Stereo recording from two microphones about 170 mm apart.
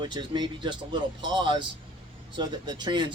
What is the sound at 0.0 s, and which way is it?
Speech, 25° right (ahead or behind).